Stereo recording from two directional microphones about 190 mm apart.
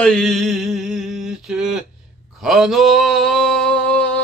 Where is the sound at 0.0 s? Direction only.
Centre (ahead or behind).